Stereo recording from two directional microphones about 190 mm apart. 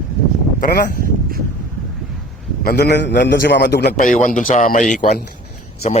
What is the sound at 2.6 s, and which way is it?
A man's voice, 55° left (ahead or behind).